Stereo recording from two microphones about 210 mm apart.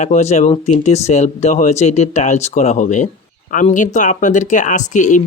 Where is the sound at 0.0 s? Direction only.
35° left (ahead or behind).